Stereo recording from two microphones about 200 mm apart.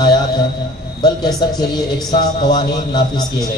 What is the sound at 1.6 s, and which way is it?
A man's voice, 20° left (ahead or behind).